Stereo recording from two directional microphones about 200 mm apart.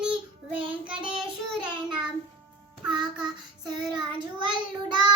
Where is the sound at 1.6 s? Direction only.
20° right (ahead or behind).